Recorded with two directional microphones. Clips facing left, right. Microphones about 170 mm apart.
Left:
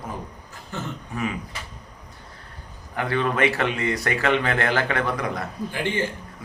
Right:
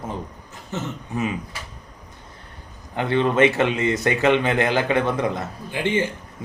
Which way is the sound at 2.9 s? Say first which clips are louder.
Right 4 dB; 20° right (ahead or behind).